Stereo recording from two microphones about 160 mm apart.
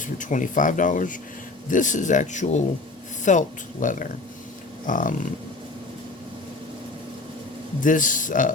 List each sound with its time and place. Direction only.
0.0 s a man's voice: 50° left (ahead or behind)
7.8 s a man's voice: 55° left (ahead or behind)